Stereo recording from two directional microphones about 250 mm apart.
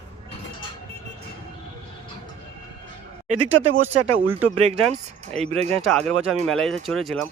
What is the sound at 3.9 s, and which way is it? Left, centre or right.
Speech, right.